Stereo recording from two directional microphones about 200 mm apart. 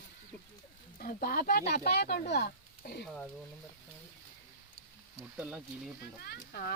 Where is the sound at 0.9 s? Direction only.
50° left (ahead or behind).